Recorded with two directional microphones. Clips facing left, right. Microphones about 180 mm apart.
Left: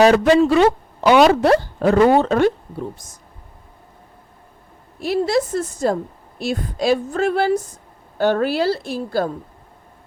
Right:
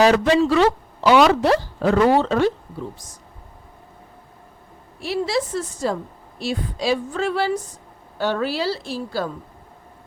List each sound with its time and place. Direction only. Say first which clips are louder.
0.0 s speech: left 3 dB; 55° left (ahead or behind)
0.5 s a sound: left 3 dB; 20° left (ahead or behind)
1.3 s speech: left 3 dB; 55° left (ahead or behind)
4.9 s speech: left 4 dB; 45° left (ahead or behind)